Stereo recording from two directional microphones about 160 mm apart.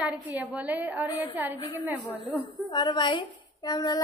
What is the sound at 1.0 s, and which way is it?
Speech, 20° left (ahead or behind).